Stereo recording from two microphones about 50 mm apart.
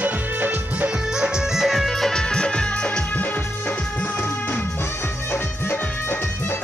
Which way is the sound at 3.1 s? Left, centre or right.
Left.